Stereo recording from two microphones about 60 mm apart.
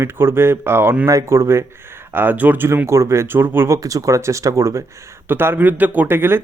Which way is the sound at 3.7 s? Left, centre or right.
Right.